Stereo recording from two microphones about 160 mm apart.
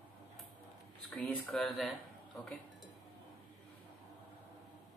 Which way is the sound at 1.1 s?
10° left (ahead or behind).